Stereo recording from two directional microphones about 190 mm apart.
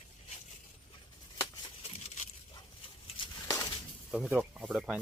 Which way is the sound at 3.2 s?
25° left (ahead or behind).